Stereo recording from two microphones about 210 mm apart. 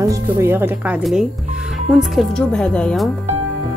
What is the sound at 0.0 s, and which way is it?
Speech, 15° right (ahead or behind).